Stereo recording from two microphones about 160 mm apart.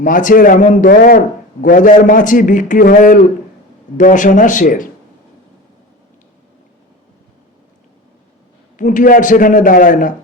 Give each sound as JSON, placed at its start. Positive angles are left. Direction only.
{"t": 0.0, "sound": "a man's voice", "side_deg": 55}
{"t": 8.8, "sound": "a man's voice", "side_deg": 55}